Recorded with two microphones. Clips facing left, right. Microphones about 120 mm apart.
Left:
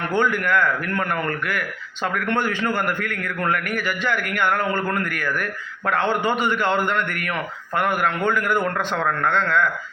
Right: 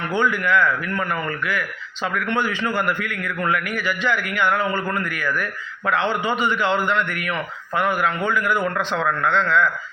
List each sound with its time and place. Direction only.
0.2 s a man's voice: 50° left (ahead or behind)
2.1 s a man's voice: 45° left (ahead or behind)